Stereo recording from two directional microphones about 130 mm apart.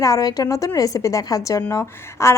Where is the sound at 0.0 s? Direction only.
25° left (ahead or behind).